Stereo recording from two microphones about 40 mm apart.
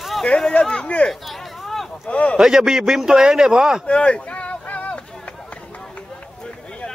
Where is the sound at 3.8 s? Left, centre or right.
Left.